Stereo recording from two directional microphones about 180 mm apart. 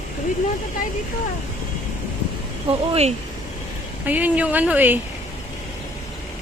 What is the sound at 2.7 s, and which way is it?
Speech, 30° right (ahead or behind).